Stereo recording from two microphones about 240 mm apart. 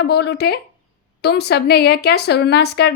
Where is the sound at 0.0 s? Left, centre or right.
Left.